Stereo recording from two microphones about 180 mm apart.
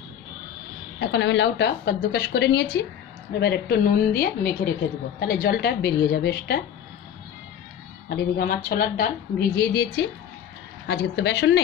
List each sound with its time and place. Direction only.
0.9 s a woman's voice: 90° left; by 6.6 s 65° left (ahead or behind)
8.1 s a woman's voice: 55° left (ahead or behind); by 11.6 s 70° left (ahead or behind)